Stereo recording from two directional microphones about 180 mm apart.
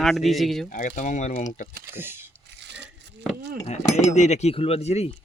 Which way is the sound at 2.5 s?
75° right (ahead or behind).